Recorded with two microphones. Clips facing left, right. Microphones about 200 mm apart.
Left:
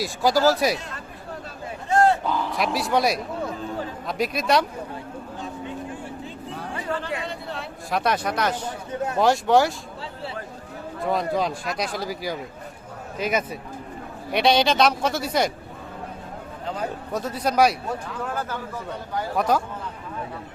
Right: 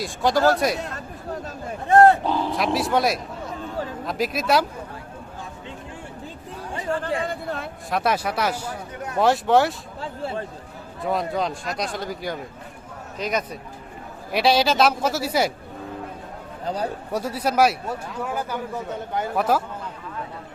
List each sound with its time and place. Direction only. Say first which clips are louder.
0.0 s speech: even; 5° left (ahead or behind)
1.9 s a sound: right 5 dB; 55° right (ahead or behind)
2.2 s a sound: right 2 dB; 30° right (ahead or behind)
2.7 s speech: even; centre (ahead or behind)
7.3 s a sound: right 3 dB; 50° right (ahead or behind)
7.9 s speech: even; centre (ahead or behind)
8.9 s speech: left 6 dB; 25° left (ahead or behind)
9.1 s speech: right 1 dB; centre (ahead or behind)
11.0 s speech: left 1 dB; centre (ahead or behind)
17.1 s a man's voice: even; 10° right (ahead or behind)